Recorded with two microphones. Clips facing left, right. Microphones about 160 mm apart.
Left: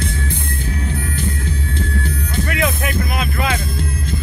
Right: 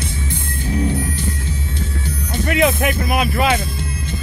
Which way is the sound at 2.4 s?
20° right (ahead or behind).